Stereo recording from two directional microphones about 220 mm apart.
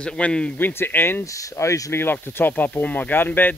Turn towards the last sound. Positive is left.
turn(degrees=10)  # may be behind; listen again after turning